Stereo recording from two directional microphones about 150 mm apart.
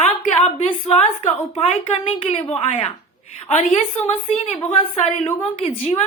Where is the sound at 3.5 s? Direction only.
50° left (ahead or behind).